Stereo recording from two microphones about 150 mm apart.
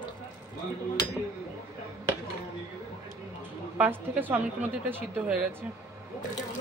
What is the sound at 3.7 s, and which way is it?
A woman's voice, 10° right (ahead or behind).